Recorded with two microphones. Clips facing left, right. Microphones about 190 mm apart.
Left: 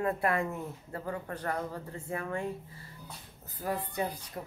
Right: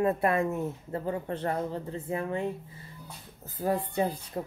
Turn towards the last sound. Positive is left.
turn(degrees=-25)  # may be behind; listen again after turning